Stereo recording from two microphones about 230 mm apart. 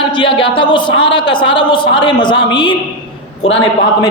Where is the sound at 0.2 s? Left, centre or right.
Left.